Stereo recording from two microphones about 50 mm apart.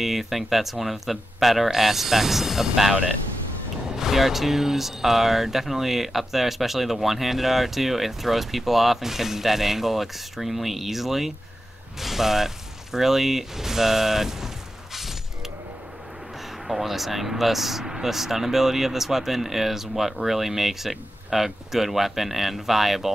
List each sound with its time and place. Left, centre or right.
0.0 s speech: centre
16.6 s speech: centre